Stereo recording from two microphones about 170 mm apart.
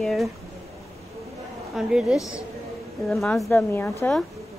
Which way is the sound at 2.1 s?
20° left (ahead or behind).